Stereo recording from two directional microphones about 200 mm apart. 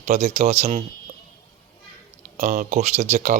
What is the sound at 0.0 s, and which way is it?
Speech, 35° right (ahead or behind).